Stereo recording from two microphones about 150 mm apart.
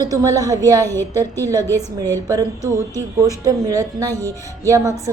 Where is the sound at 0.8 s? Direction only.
15° left (ahead or behind).